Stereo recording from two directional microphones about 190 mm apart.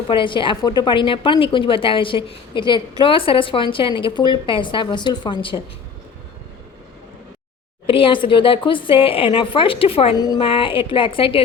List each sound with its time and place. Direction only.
0.1 s a woman's voice: 25° left (ahead or behind)
7.9 s a woman's voice: 30° left (ahead or behind)